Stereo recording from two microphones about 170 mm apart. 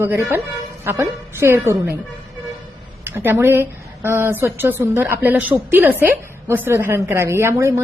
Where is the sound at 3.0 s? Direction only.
10° right (ahead or behind).